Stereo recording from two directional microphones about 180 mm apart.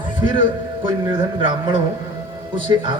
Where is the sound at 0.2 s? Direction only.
25° right (ahead or behind).